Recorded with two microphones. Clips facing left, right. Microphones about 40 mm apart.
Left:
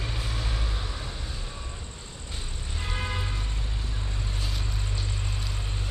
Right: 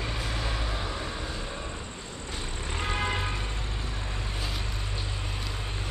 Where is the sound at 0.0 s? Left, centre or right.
Centre.